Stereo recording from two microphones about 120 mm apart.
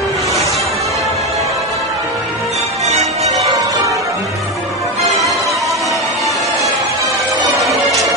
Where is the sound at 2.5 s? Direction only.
65° right (ahead or behind).